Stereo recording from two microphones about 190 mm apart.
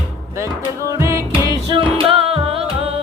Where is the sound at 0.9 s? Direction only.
15° right (ahead or behind).